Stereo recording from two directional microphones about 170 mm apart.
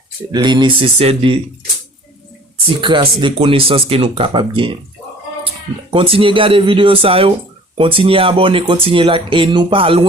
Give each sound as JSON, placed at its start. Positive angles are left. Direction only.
{"t": 0.3, "sound": "speech", "side_deg": -25}
{"t": 2.6, "sound": "speech", "side_deg": -30}
{"t": 5.9, "sound": "speech", "side_deg": -30}